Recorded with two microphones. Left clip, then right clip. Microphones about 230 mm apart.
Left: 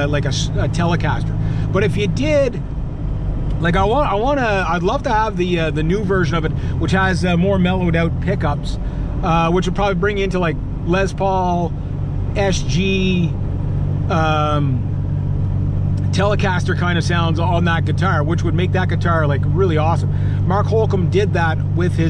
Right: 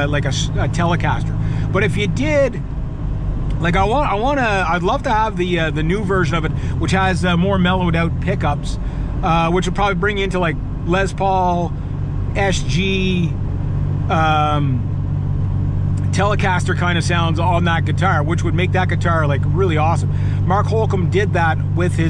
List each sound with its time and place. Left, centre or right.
0.0 s speech: right
3.6 s speech: right
7.2 s speech: right
16.2 s speech: right